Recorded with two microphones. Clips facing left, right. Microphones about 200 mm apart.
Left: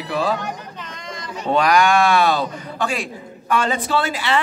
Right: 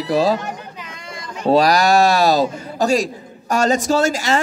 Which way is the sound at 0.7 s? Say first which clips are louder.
Left 1 dB; 10° right (ahead or behind).